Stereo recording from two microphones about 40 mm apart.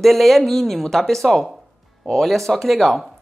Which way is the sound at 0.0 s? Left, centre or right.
Centre.